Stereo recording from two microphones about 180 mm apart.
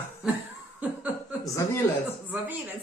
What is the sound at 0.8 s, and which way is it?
Laughter, 10° right (ahead or behind).